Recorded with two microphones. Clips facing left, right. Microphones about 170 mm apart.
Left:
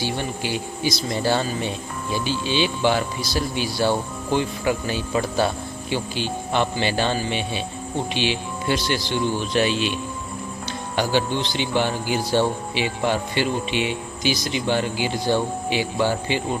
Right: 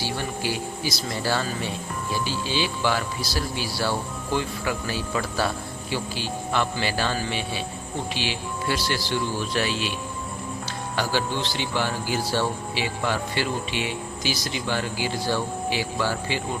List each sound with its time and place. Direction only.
0.0 s speech: 20° left (ahead or behind)